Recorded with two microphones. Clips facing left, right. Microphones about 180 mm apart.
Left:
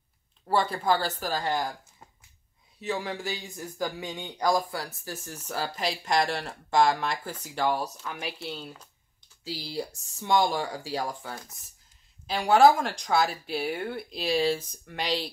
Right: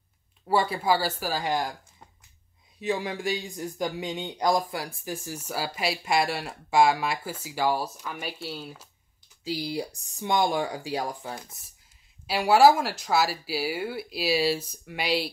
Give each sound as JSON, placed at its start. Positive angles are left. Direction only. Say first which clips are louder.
{"t": 0.5, "sound": "speech", "louder": "right 1 dB", "side_deg": -10}
{"t": 2.8, "sound": "speech", "louder": "right 3 dB", "side_deg": -15}
{"t": 12.3, "sound": "speech", "louder": "right 1 dB", "side_deg": -5}